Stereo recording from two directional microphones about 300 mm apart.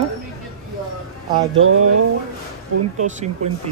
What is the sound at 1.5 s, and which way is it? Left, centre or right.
Speech, right.